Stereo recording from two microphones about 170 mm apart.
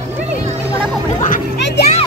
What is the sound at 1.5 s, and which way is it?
Music, 90° left.